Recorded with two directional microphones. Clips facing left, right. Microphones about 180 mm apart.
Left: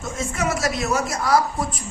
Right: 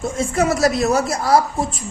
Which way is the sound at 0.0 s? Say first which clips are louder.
Right 6 dB; 35° right (ahead or behind).